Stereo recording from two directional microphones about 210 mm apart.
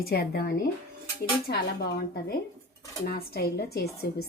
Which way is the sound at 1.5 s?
50° left (ahead or behind).